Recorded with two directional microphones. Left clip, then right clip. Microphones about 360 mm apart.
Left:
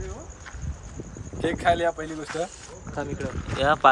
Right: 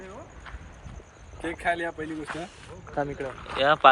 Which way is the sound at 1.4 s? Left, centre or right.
Centre.